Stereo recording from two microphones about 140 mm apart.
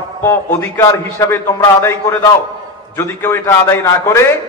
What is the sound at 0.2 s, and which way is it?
A man's voice, 15° left (ahead or behind).